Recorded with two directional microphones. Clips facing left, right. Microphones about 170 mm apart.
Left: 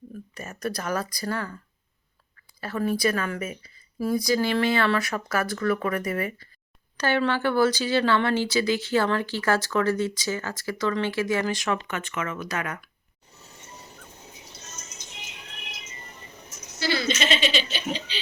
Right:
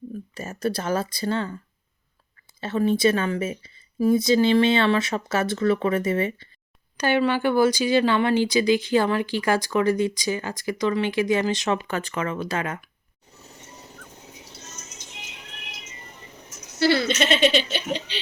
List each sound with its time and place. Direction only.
0.3 s speech: 30° right (ahead or behind)
2.6 s speech: 25° right (ahead or behind)
6.9 s speech: 15° right (ahead or behind)
11.9 s speech: 35° right (ahead or behind)
16.8 s speech: 60° right (ahead or behind)